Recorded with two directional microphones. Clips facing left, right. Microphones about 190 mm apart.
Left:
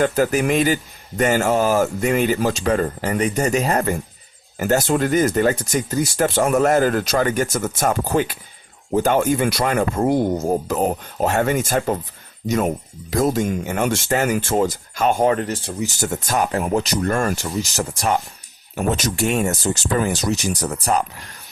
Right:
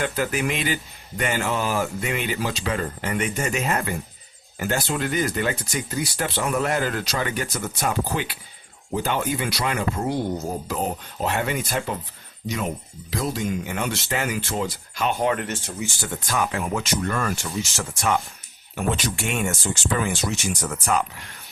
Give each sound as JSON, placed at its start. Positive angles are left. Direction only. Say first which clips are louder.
{"t": 0.0, "sound": "speech", "louder": "left 7 dB", "side_deg": 40}